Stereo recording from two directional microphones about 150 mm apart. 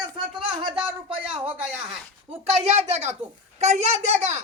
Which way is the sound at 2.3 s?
45° right (ahead or behind).